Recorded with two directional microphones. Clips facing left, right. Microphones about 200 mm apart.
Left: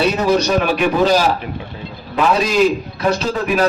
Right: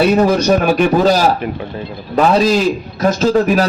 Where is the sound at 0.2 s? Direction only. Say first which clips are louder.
Right 3 dB; 50° right (ahead or behind).